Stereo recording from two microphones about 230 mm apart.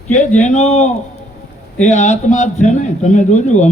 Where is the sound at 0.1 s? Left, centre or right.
Left.